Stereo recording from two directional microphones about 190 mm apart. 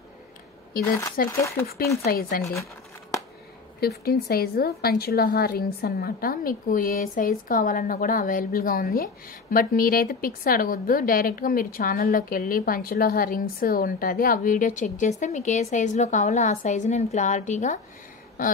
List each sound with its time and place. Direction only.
1.3 s speech: 15° left (ahead or behind)
2.0 s a woman's voice: 50° left (ahead or behind)
3.8 s a woman's voice: 55° left (ahead or behind)